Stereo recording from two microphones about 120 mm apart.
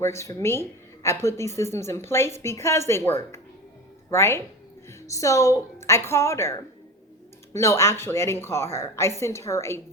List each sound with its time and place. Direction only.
0.0 s a woman's voice: 25° left (ahead or behind)